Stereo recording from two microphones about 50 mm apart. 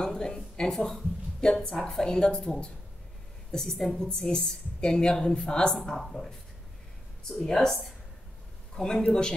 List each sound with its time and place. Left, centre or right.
0.0 s a woman's voice: centre
3.8 s a woman's voice: centre